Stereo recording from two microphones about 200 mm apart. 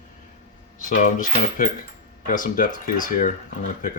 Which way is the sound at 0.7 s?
40° left (ahead or behind).